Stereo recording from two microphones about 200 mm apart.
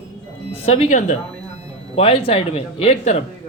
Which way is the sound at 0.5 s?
30° left (ahead or behind).